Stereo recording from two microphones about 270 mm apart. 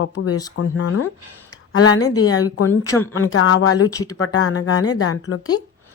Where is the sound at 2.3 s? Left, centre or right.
Left.